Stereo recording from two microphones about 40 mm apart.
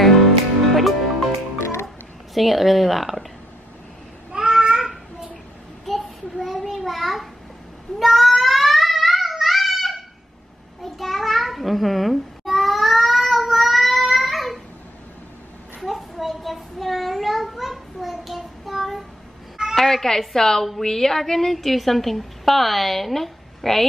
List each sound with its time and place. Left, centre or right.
0.0 s music: centre
2.3 s a woman's voice: centre
4.3 s a sound: centre
5.9 s a sound: centre
8.0 s child singing: centre
10.8 s babbling: centre
15.8 s a sound: centre
18.4 s child singing: centre
19.7 s a woman's voice: centre